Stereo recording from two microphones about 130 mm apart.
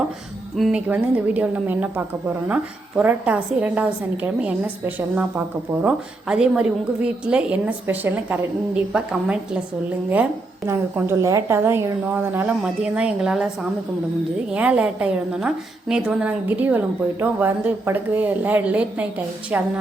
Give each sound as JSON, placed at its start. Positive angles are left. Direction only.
{"t": 0.5, "sound": "speech", "side_deg": 0}
{"t": 0.9, "sound": "a woman's voice", "side_deg": -10}
{"t": 10.7, "sound": "a woman's voice", "side_deg": -20}